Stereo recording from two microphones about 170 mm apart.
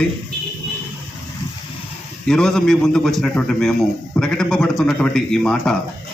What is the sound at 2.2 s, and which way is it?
Speech, 5° left (ahead or behind).